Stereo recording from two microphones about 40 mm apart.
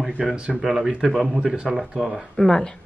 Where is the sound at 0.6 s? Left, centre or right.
Centre.